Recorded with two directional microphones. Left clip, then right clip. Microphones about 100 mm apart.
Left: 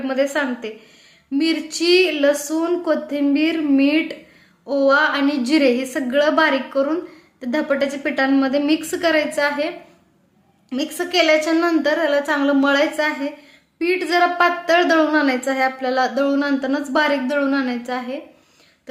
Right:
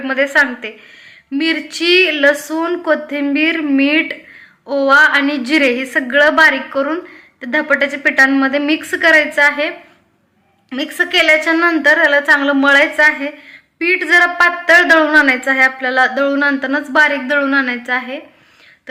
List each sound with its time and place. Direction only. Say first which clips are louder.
0.0 s a woman's voice: right 7 dB; 20° left (ahead or behind)